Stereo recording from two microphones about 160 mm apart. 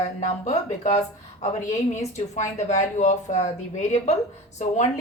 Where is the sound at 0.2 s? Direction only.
50° left (ahead or behind).